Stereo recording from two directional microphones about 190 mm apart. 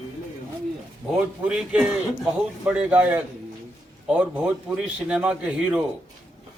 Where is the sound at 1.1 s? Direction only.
5° right (ahead or behind).